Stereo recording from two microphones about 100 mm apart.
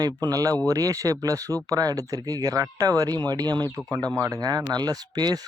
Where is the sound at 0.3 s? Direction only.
35° right (ahead or behind).